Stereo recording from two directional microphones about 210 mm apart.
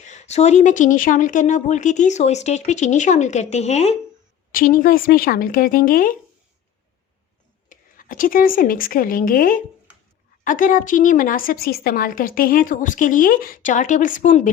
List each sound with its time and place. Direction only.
0.0 s a woman's voice: 35° left (ahead or behind)
4.5 s a woman's voice: 40° left (ahead or behind)
7.7 s a woman's voice: 40° left (ahead or behind)